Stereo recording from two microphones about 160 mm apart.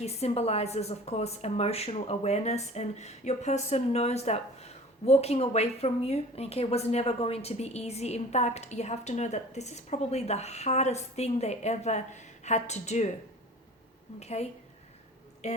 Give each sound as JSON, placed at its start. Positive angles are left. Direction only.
{"t": 0.0, "sound": "a woman's voice", "side_deg": 40}
{"t": 14.2, "sound": "a woman's voice", "side_deg": 40}
{"t": 15.4, "sound": "speech", "side_deg": 45}